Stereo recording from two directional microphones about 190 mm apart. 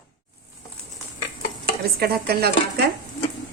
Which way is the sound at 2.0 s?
55° right (ahead or behind).